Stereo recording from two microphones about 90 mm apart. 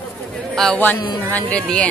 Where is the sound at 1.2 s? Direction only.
15° left (ahead or behind).